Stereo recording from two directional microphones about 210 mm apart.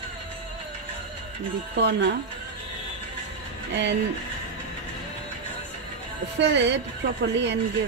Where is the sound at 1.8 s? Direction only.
55° right (ahead or behind).